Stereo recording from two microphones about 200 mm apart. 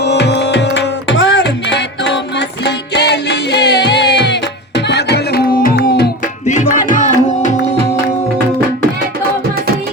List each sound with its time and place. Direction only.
0.0 s music: 60° left (ahead or behind)
6.5 s music: 40° left (ahead or behind)